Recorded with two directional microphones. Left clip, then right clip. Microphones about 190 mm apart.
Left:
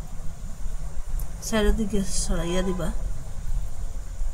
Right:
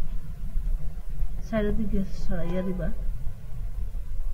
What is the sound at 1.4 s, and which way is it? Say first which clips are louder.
A woman's voice: left 4 dB; 35° left (ahead or behind).